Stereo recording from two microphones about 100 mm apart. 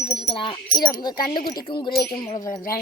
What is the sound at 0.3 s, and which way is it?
Speech, 55° left (ahead or behind).